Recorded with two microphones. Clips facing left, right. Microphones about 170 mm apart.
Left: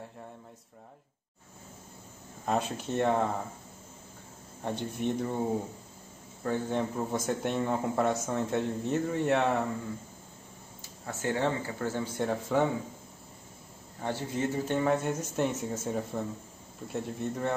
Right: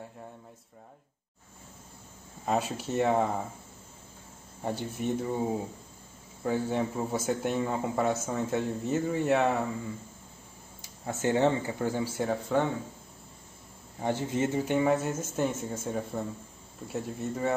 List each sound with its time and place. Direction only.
2.4 s speech: 5° right (ahead or behind)
4.6 s speech: 5° right (ahead or behind)
6.4 s speech: 10° right (ahead or behind)
10.8 s speech: 20° right (ahead or behind); by 12.6 s centre (ahead or behind)
14.0 s speech: 20° right (ahead or behind); by 17.6 s centre (ahead or behind)